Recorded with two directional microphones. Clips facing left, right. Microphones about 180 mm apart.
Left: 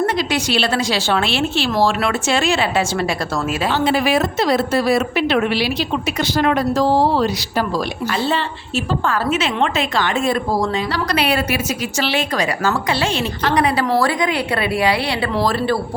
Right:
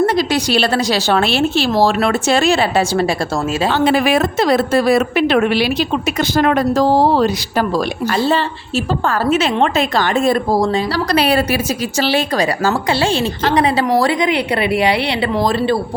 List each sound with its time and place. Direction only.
0.0 s a woman's voice: 35° right (ahead or behind)
3.8 s a woman's voice: 55° right (ahead or behind); by 15.8 s 20° right (ahead or behind)